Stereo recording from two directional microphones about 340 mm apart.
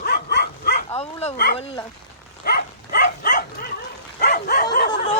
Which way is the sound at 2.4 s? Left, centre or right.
Left.